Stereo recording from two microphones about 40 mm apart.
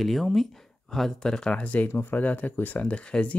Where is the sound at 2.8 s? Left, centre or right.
Left.